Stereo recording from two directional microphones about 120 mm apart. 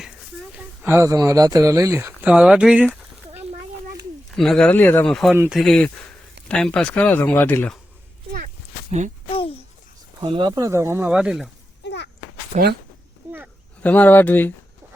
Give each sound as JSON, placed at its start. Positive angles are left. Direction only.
{"t": 0.5, "sound": "speech", "side_deg": -20}
{"t": 2.2, "sound": "speech", "side_deg": -10}
{"t": 4.3, "sound": "speech", "side_deg": 0}
{"t": 4.7, "sound": "speech", "side_deg": 15}
{"t": 5.0, "sound": "speech", "side_deg": 5}
{"t": 8.9, "sound": "speech", "side_deg": -85}
{"t": 10.2, "sound": "speech", "side_deg": -40}
{"t": 10.6, "sound": "speech", "side_deg": -25}
{"t": 11.1, "sound": "speech", "side_deg": -5}
{"t": 12.5, "sound": "speech", "side_deg": -75}
{"t": 13.2, "sound": "a sound", "side_deg": -20}
{"t": 13.8, "sound": "speech", "side_deg": 15}